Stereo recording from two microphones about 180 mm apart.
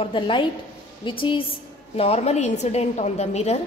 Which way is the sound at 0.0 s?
30° left (ahead or behind).